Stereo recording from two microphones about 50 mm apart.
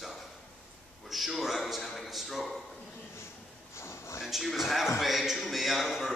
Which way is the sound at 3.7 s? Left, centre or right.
Left.